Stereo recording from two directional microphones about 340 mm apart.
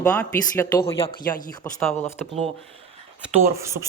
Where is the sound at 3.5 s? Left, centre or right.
Centre.